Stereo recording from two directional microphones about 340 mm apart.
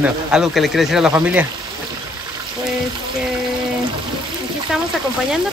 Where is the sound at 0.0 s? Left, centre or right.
Centre.